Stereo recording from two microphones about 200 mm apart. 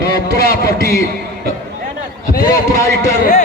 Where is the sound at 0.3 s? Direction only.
50° left (ahead or behind).